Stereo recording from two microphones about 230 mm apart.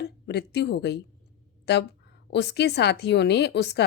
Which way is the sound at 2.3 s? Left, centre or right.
Left.